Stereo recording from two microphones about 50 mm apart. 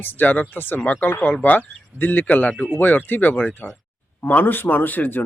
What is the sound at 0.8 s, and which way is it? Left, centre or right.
Speech, left.